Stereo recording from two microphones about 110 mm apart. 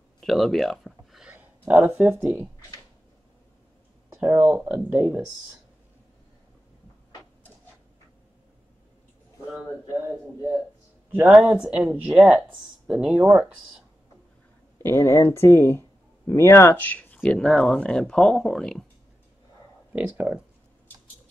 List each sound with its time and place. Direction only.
0.2 s a sound: centre (ahead or behind)
1.7 s speech: 10° right (ahead or behind)
4.1 s a sound: 20° right (ahead or behind)
4.6 s speech: 10° right (ahead or behind)
11.1 s speech: 15° right (ahead or behind)
14.8 s speech: 20° left (ahead or behind); by 18.9 s 5° left (ahead or behind)
19.9 s speech: 15° right (ahead or behind)